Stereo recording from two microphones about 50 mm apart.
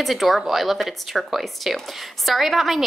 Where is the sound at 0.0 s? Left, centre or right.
Centre.